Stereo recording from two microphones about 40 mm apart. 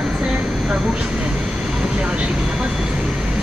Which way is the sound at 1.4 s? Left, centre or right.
Centre.